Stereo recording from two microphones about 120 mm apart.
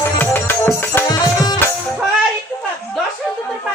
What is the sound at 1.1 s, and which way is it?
Music, 35° left (ahead or behind).